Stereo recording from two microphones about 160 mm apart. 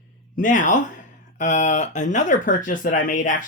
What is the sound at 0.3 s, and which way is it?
Speech, 55° left (ahead or behind).